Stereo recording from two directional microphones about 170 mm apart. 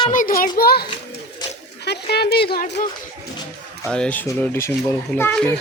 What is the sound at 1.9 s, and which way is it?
Speech, 70° left (ahead or behind).